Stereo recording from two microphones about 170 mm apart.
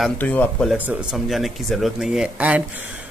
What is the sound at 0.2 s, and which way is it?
Speech, 10° left (ahead or behind).